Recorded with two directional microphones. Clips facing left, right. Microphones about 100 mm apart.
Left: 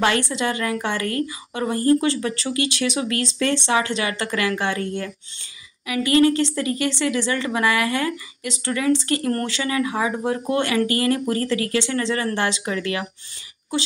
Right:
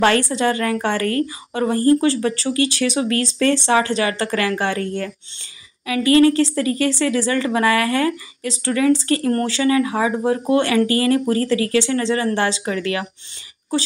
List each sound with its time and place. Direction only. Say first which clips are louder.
0.0 s a woman's voice: right 4 dB; 40° right (ahead or behind)
5.9 s a woman's voice: right 3 dB; 30° right (ahead or behind)